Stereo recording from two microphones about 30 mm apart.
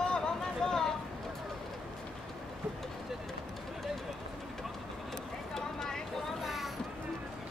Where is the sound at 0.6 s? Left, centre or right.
Centre.